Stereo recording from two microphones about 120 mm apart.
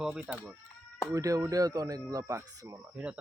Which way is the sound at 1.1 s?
25° right (ahead or behind).